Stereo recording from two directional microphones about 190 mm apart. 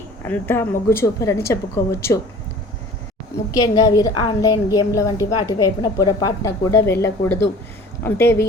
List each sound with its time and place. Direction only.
0.3 s a woman's voice: 10° left (ahead or behind)
3.5 s a woman's voice: 20° left (ahead or behind)